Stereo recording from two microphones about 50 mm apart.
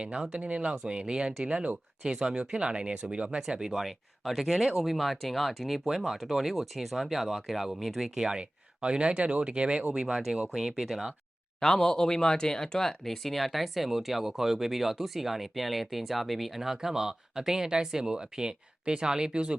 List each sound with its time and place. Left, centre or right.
0.3 s speech: right
3.6 s speech: centre; by 9.9 s right
9.9 s speech: centre
11.6 s speech: centre